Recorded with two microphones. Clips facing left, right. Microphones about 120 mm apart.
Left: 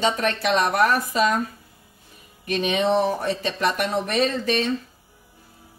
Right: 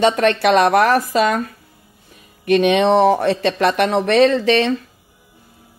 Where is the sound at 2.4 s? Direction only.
70° right (ahead or behind).